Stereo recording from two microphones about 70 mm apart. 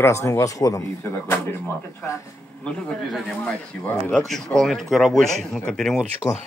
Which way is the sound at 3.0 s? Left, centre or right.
Centre.